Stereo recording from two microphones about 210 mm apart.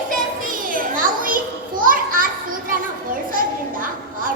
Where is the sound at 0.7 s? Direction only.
40° right (ahead or behind).